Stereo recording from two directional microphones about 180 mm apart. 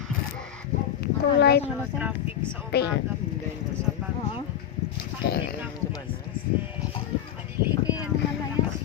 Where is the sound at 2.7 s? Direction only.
65° left (ahead or behind).